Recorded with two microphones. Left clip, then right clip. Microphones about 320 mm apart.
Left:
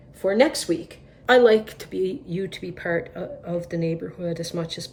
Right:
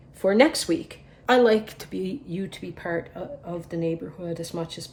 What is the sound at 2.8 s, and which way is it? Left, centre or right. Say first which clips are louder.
Speech: left 3 dB; right.